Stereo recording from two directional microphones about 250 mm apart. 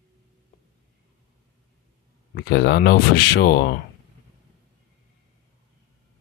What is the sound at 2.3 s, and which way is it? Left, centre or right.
Speech, left.